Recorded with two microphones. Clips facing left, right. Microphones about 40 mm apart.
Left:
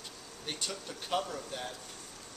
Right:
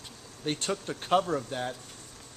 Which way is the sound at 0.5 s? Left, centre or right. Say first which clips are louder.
Right 8 dB; right.